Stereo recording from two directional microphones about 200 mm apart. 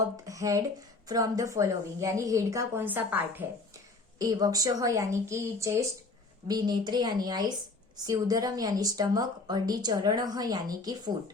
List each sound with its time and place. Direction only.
0.3 s a woman's voice: 15° right (ahead or behind)